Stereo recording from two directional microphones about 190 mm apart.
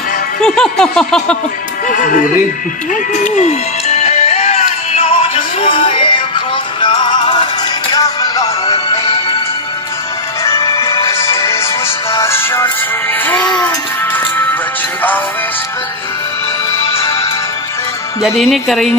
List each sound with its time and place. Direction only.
0.4 s music: 5° left (ahead or behind)
1.9 s speech: 45° left (ahead or behind)
3.3 s music: 35° left (ahead or behind); by 8.5 s 20° left (ahead or behind)
8.6 s music: 30° left (ahead or behind)
10.4 s music: 15° left (ahead or behind)
18.2 s music: centre (ahead or behind)